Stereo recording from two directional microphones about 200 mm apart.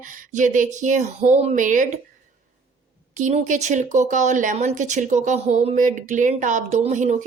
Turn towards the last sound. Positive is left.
turn(degrees=-35)  # may be behind; listen again after turning